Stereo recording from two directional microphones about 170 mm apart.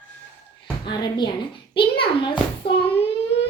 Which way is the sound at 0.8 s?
25° left (ahead or behind).